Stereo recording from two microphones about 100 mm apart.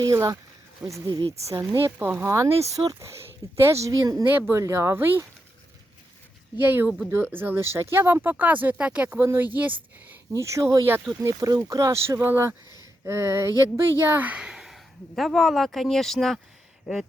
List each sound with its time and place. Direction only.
0.0 s speech: 35° right (ahead or behind)
4.3 s speech: 20° right (ahead or behind)
6.6 s speech: 20° right (ahead or behind)
10.1 s speech: 30° right (ahead or behind)
12.7 s a sound: 25° right (ahead or behind)
13.6 s a woman's voice: 25° right (ahead or behind); by 16.4 s centre (ahead or behind)